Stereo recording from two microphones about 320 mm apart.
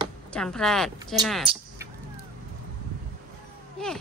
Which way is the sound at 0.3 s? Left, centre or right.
Centre.